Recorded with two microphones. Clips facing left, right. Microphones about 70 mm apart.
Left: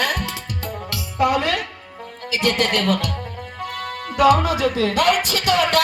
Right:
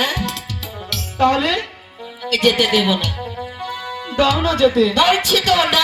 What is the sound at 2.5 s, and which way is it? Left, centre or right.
Music, right.